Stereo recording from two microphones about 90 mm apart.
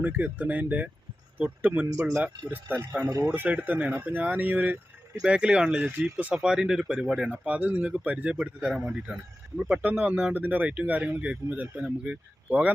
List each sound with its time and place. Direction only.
0.0 s speech: 20° right (ahead or behind)